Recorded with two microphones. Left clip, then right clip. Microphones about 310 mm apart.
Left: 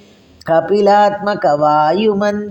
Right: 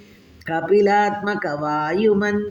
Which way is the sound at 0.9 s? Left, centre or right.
Centre.